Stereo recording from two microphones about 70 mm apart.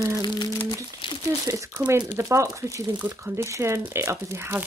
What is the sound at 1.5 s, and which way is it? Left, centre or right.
Speech, right.